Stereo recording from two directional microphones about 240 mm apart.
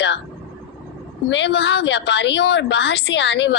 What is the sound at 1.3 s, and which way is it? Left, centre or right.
A woman's voice, left.